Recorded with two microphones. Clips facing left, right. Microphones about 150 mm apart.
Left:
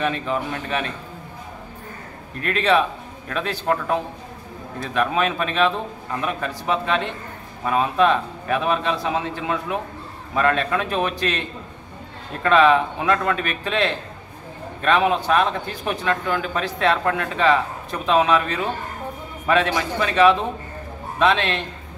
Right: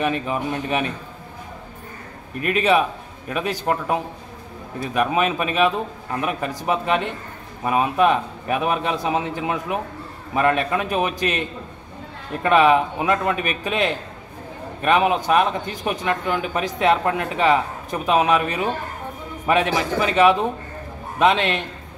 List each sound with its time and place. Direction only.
0.0 s speech: 15° right (ahead or behind)
2.4 s speech: 10° right (ahead or behind)
12.4 s speech: 15° right (ahead or behind)